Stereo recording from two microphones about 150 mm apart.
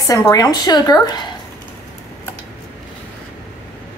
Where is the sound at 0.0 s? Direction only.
20° left (ahead or behind).